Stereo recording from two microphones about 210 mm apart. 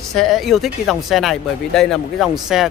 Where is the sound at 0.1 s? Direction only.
Centre (ahead or behind).